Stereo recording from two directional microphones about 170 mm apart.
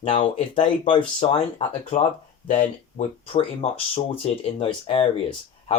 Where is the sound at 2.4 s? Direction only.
45° left (ahead or behind).